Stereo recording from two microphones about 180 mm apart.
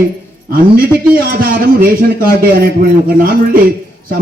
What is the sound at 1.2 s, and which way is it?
A man's voice, 50° right (ahead or behind).